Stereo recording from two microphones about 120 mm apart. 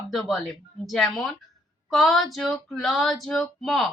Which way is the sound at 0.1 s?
Centre (ahead or behind).